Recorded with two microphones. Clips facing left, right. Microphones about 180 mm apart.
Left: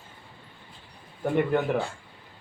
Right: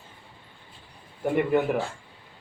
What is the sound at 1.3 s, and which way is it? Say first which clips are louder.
Speech: right 1 dB; 5° right (ahead or behind).